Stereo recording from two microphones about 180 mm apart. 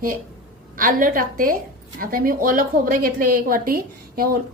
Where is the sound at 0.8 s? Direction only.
50° right (ahead or behind).